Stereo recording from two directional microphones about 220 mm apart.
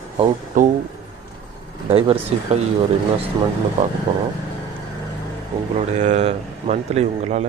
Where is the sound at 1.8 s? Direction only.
25° right (ahead or behind).